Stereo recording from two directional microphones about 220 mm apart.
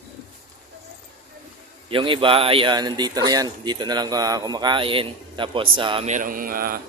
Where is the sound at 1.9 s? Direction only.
25° right (ahead or behind); by 6.7 s 40° right (ahead or behind).